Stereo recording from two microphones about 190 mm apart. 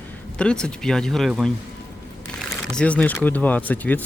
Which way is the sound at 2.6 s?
5° left (ahead or behind).